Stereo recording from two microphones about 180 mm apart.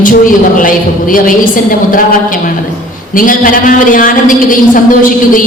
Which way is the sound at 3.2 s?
50° left (ahead or behind).